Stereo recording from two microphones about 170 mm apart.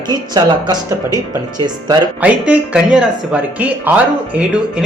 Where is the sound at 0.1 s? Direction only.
25° right (ahead or behind).